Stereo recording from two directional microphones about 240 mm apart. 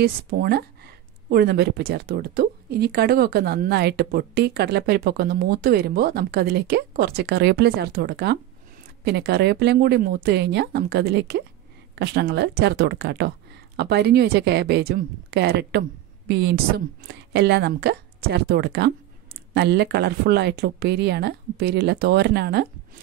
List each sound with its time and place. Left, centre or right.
0.0 s speech: right